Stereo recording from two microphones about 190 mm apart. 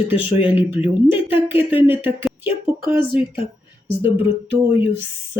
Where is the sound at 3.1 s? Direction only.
25° left (ahead or behind).